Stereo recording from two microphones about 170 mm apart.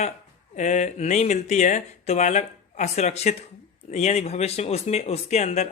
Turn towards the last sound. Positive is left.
turn(degrees=40)  # may be behind; listen again after turning